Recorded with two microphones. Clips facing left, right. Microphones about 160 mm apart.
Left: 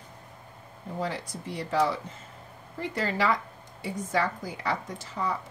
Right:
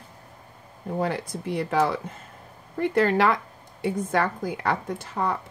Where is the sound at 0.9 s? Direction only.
60° right (ahead or behind).